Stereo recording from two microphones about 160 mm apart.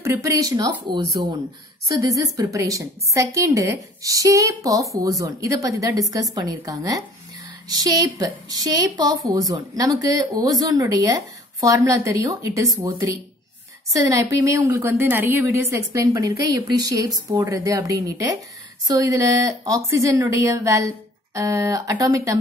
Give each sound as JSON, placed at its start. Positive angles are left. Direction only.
{"t": 0.0, "sound": "a woman's voice", "side_deg": -20}